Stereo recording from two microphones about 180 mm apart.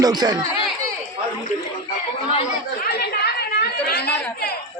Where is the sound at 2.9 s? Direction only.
65° left (ahead or behind).